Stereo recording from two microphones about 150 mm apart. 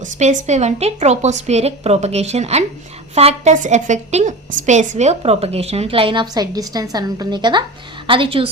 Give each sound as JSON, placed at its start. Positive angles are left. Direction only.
{"t": 0.0, "sound": "a woman's voice", "side_deg": -55}